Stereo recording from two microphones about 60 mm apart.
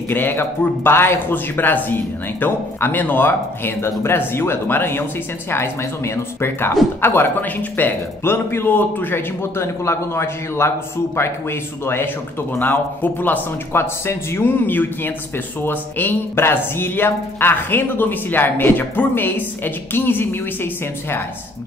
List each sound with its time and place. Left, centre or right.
0.1 s a man's voice: left
8.2 s a man's voice: left
13.7 s a man's voice: left